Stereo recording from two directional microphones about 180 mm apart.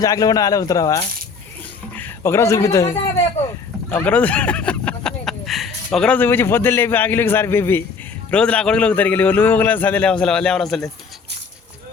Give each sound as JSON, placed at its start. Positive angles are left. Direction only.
{"t": 0.0, "sound": "a man's voice", "side_deg": 20}